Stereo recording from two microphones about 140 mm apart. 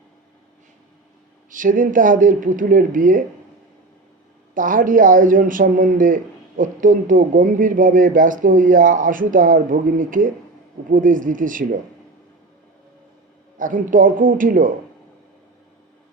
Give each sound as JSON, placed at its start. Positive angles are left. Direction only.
{"t": 1.5, "sound": "speech", "side_deg": -70}
{"t": 4.5, "sound": "speech", "side_deg": -70}
{"t": 13.6, "sound": "speech", "side_deg": -70}